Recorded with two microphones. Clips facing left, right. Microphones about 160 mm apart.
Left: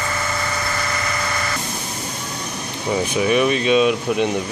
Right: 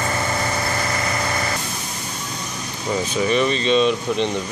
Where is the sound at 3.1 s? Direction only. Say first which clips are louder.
Left 2 dB; 10° left (ahead or behind).